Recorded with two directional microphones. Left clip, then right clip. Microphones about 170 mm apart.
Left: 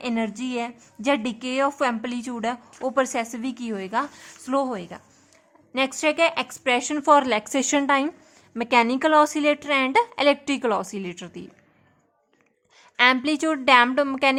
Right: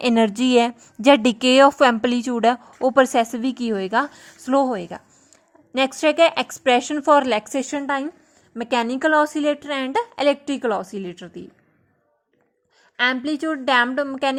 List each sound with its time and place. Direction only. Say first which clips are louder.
0.0 s a woman's voice: right 9 dB; 45° right (ahead or behind); by 7.4 s 15° right (ahead or behind)
7.4 s a woman's voice: left 2 dB; centre (ahead or behind)
8.5 s a woman's voice: left 2 dB; 10° right (ahead or behind)
12.8 s a woman's voice: left 2 dB; 10° right (ahead or behind)